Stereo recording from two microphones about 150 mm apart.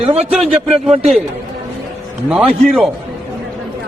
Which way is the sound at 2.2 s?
5° right (ahead or behind).